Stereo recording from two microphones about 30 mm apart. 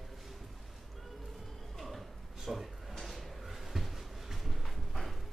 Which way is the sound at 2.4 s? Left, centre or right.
Centre.